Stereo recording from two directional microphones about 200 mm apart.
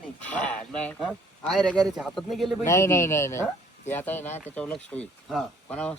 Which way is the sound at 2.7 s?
15° left (ahead or behind).